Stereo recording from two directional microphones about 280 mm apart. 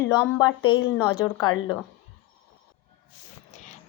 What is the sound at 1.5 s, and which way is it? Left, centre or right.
Speech, left.